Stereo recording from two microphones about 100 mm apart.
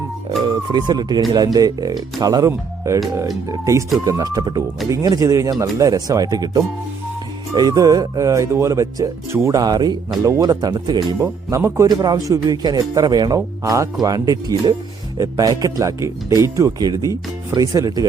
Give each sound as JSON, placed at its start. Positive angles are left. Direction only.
{"t": 0.4, "sound": "speech", "side_deg": -45}